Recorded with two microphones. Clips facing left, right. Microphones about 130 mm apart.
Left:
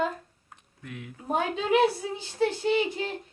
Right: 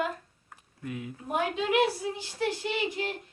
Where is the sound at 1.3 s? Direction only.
25° left (ahead or behind).